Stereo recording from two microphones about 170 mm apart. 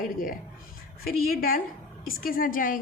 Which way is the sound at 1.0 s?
60° left (ahead or behind).